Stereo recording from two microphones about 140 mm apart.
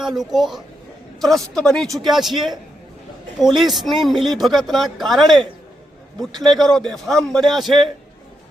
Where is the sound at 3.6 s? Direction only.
Centre (ahead or behind).